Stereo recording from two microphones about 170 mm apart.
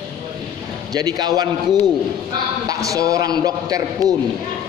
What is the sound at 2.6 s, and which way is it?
A man's voice, 20° right (ahead or behind).